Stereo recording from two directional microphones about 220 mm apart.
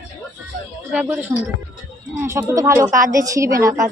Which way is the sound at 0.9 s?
5° right (ahead or behind).